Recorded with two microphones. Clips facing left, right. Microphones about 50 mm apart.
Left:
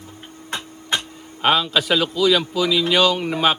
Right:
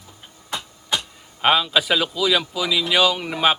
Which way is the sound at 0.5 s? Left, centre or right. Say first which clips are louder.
Left 1 dB; left.